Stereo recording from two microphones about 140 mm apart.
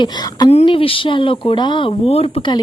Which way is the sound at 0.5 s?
40° left (ahead or behind).